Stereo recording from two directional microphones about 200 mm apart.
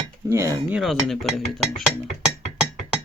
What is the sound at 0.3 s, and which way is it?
Dishes, 15° right (ahead or behind).